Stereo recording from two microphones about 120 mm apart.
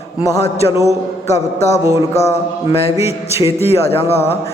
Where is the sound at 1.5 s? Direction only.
65° left (ahead or behind).